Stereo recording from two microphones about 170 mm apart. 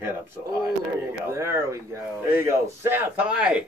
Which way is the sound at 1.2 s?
15° right (ahead or behind).